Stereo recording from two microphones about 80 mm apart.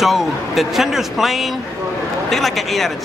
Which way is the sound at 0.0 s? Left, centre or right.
Centre.